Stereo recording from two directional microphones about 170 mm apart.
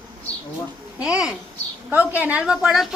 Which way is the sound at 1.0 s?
5° right (ahead or behind).